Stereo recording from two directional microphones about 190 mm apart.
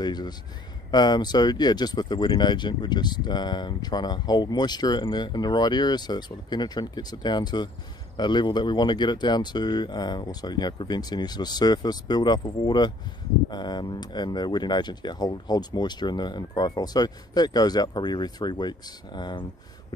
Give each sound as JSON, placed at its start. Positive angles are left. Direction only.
{"t": 0.0, "sound": "speech", "side_deg": 20}